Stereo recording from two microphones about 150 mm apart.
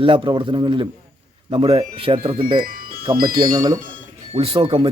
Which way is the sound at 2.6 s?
75° right (ahead or behind).